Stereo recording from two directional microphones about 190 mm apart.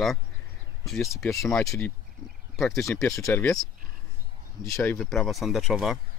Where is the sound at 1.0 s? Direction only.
15° left (ahead or behind).